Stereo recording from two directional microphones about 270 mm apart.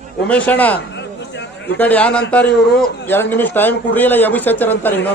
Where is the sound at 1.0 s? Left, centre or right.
Left.